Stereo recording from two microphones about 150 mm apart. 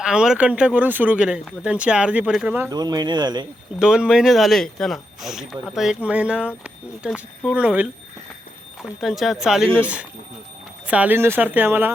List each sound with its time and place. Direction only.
0.0 s speech: 5° right (ahead or behind)
2.6 s speech: 25° right (ahead or behind)
3.8 s speech: 5° right (ahead or behind)